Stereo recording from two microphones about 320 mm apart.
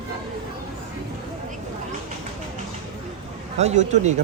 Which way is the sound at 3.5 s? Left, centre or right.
Right.